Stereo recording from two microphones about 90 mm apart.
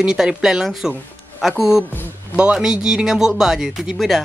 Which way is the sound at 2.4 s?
10° right (ahead or behind).